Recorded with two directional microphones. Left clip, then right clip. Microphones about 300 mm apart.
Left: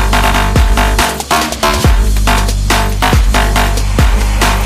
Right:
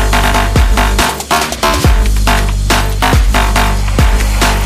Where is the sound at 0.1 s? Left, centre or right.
Centre.